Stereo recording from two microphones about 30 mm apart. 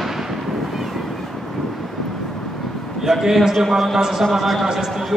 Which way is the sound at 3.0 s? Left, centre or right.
Centre.